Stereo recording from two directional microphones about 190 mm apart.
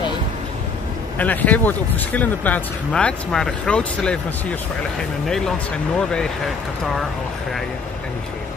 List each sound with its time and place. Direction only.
1.1 s speech: 10° left (ahead or behind)